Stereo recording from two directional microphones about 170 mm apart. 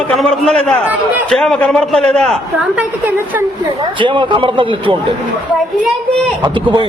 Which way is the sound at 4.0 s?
30° right (ahead or behind).